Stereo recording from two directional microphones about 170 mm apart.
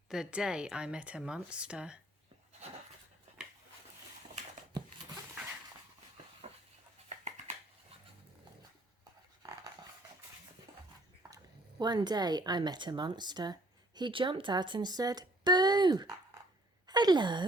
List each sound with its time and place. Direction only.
0.1 s speech: 5° right (ahead or behind)
11.8 s speech: 25° right (ahead or behind)
16.8 s a sound: 25° right (ahead or behind)